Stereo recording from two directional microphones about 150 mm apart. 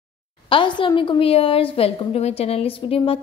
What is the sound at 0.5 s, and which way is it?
A woman's voice, 35° left (ahead or behind).